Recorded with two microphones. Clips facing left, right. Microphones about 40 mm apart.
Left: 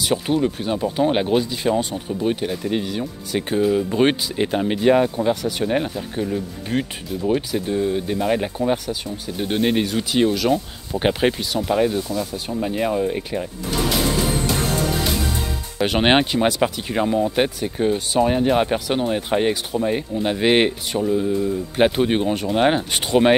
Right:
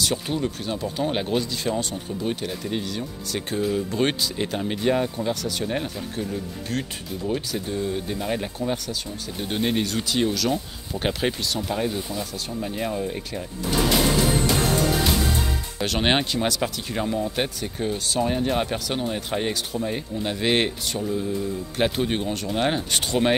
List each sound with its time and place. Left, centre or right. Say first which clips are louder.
0.0 s speech: left 5 dB; centre
15.8 s speech: left 6 dB; left